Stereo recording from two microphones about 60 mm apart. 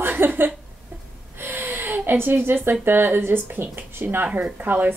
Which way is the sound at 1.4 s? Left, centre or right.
Right.